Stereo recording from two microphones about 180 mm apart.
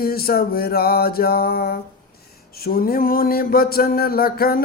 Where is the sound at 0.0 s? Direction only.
55° left (ahead or behind).